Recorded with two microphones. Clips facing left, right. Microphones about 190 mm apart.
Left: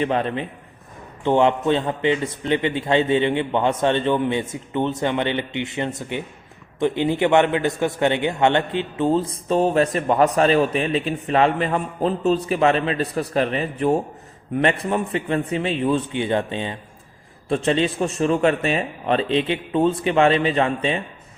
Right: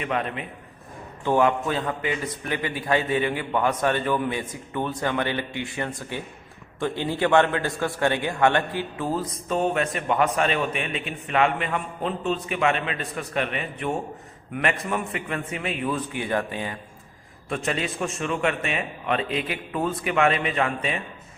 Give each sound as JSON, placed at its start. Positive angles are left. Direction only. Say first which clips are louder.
{"t": 0.0, "sound": "a man's voice", "louder": "left 6 dB", "side_deg": 30}